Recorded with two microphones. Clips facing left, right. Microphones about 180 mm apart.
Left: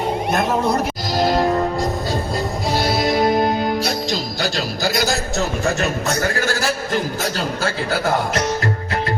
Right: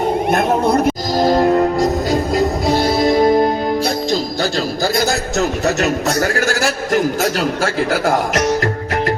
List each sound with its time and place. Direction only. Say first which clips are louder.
1.1 s music: right 3 dB; 45° right (ahead or behind)
6.1 s a man's voice: right 3 dB; 45° right (ahead or behind)